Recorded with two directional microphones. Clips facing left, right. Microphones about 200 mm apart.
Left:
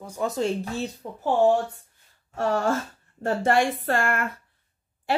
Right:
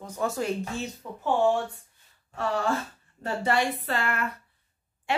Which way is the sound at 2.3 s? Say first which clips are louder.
Left 4 dB; 45° left (ahead or behind).